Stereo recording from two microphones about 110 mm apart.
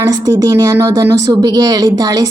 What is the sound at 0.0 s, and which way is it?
A woman's voice, 35° right (ahead or behind).